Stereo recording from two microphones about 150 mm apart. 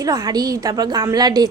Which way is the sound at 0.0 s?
25° right (ahead or behind).